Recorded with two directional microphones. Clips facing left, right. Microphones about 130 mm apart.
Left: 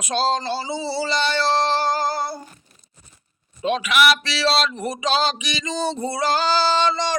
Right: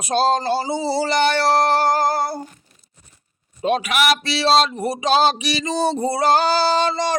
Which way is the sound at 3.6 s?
40° right (ahead or behind).